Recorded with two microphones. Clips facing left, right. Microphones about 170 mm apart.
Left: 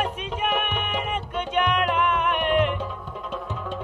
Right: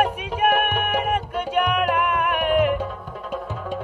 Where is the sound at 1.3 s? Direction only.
10° right (ahead or behind).